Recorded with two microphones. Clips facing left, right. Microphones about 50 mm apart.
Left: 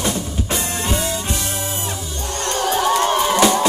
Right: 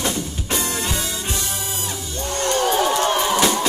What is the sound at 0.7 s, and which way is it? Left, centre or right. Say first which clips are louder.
Music: left 2 dB; left.